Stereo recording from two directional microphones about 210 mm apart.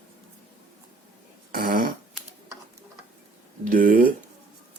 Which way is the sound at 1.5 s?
45° right (ahead or behind).